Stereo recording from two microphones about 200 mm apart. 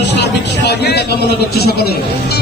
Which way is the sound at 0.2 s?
55° left (ahead or behind).